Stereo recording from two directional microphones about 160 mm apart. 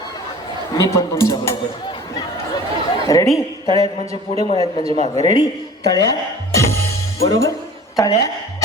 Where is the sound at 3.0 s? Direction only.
20° left (ahead or behind).